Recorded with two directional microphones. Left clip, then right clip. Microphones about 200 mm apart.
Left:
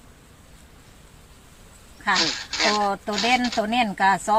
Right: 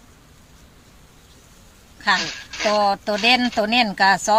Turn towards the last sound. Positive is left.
turn(degrees=-40)  # may be behind; listen again after turning